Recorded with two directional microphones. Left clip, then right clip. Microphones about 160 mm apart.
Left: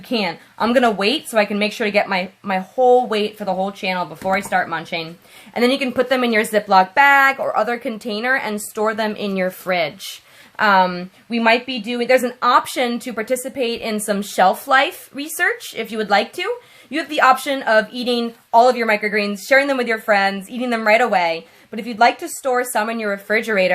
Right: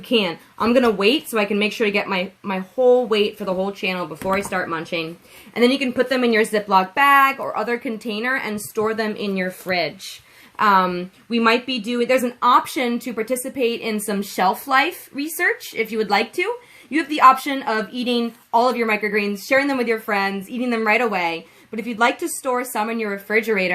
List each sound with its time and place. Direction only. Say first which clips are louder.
0.1 s speech: right 2 dB; 20° left (ahead or behind)